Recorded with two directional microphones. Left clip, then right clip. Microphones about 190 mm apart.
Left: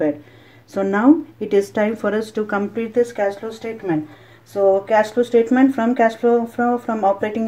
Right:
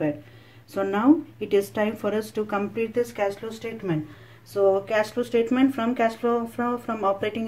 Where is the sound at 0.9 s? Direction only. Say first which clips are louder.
Left 6 dB; 10° left (ahead or behind).